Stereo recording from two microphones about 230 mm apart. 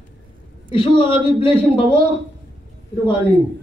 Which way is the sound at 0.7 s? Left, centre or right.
Left.